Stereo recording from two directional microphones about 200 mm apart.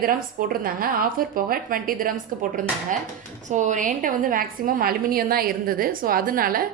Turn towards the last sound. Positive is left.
turn(degrees=-45)  # may be behind; listen again after turning